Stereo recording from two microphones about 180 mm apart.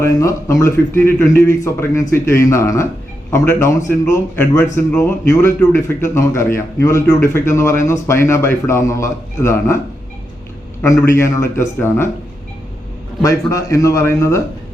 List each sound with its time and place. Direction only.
0.0 s a man's voice: 15° left (ahead or behind)
10.8 s a man's voice: 15° left (ahead or behind)
13.2 s a man's voice: 15° left (ahead or behind)